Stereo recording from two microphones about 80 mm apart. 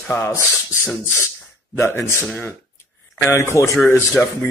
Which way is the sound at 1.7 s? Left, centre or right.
Left.